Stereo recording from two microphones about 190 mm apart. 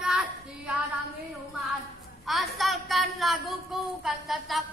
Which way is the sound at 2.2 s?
Centre (ahead or behind).